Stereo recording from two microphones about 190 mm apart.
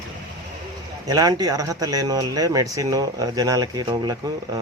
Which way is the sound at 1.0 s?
20° right (ahead or behind).